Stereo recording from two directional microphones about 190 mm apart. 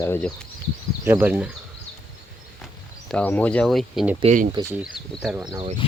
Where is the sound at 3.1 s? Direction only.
5° left (ahead or behind).